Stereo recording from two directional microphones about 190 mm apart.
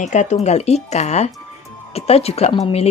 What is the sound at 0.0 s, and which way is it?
A woman's voice, 40° left (ahead or behind).